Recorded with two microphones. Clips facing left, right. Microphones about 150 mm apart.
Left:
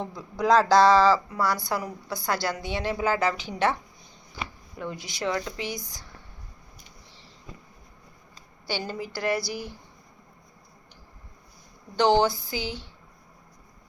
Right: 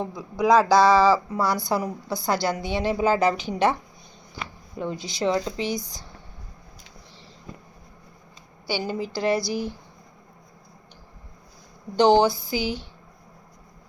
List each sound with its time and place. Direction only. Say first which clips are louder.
0.0 s a woman's voice: right 3 dB; 5° right (ahead or behind)
4.8 s a woman's voice: right 5 dB; 25° right (ahead or behind)
8.6 s a woman's voice: right 4 dB; 10° right (ahead or behind)
9.0 s a woman's voice: right 4 dB; 25° right (ahead or behind)
11.9 s a woman's voice: right 4 dB; 15° right (ahead or behind)